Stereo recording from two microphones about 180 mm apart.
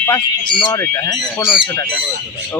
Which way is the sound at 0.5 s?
25° left (ahead or behind).